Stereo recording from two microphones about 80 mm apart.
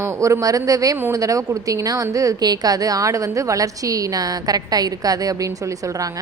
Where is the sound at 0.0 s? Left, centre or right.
Right.